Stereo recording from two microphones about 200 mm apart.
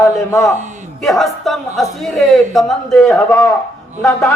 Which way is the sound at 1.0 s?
Centre (ahead or behind).